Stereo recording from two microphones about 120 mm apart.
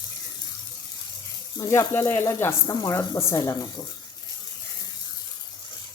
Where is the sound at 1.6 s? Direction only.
25° left (ahead or behind).